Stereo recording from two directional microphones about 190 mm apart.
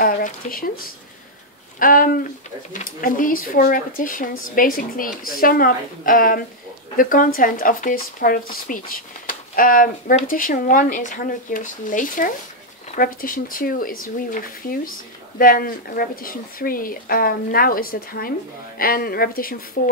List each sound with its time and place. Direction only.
0.0 s speech: 50° left (ahead or behind)
1.8 s speech: 45° left (ahead or behind)